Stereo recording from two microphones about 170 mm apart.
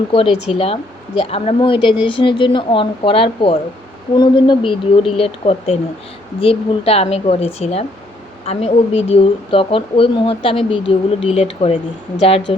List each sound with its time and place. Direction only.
0.6 s a woman's voice: 35° left (ahead or behind)